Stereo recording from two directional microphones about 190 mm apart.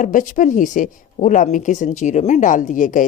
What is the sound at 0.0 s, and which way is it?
A woman's voice, 45° left (ahead or behind).